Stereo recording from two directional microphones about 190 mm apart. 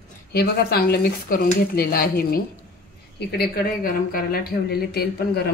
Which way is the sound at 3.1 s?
55° left (ahead or behind).